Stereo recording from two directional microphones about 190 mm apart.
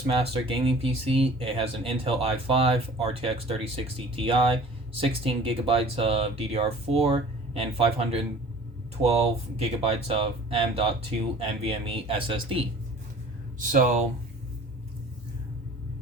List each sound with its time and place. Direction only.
0.2 s speech: 30° right (ahead or behind)
13.7 s speech: 45° right (ahead or behind)